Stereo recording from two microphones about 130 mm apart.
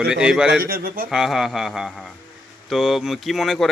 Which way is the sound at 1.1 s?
5° right (ahead or behind).